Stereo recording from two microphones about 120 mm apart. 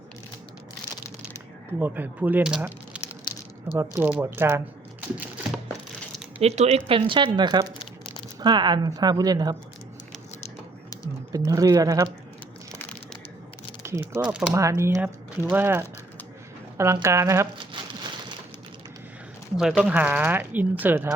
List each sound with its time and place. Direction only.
1.8 s speech: 15° right (ahead or behind)
3.7 s speech: 20° right (ahead or behind)
6.4 s speech: 65° right (ahead or behind); by 9.6 s 35° right (ahead or behind)
11.3 s speech: 30° right (ahead or behind)
14.0 s speech: 25° right (ahead or behind)
17.6 s a sound: 40° right (ahead or behind)
19.5 s speech: 5° right (ahead or behind)